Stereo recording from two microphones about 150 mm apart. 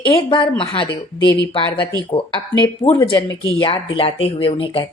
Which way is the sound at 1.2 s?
30° right (ahead or behind).